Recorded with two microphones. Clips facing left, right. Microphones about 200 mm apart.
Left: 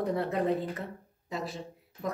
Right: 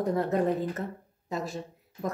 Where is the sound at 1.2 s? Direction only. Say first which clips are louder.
Right 3 dB; 45° right (ahead or behind).